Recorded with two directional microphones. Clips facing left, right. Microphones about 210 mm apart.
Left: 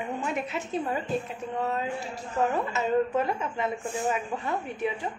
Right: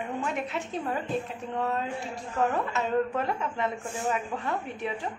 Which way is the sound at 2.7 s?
5° left (ahead or behind).